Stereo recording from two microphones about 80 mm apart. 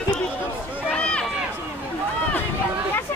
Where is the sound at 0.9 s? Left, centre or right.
Centre.